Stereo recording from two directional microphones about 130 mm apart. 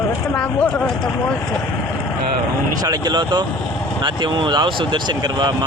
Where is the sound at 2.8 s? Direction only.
30° right (ahead or behind).